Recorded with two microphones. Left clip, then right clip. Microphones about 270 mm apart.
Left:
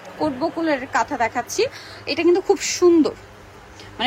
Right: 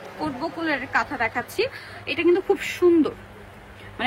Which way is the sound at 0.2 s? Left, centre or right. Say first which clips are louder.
Left 6 dB; centre.